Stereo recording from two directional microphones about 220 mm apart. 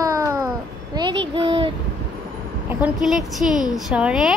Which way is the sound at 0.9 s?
20° right (ahead or behind).